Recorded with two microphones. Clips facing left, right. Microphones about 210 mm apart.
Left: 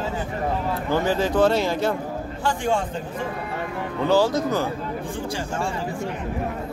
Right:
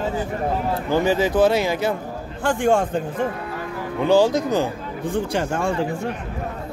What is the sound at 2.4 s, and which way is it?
Speech, 50° right (ahead or behind).